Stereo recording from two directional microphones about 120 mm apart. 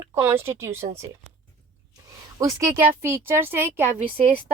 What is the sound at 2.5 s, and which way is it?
Speech, 25° right (ahead or behind).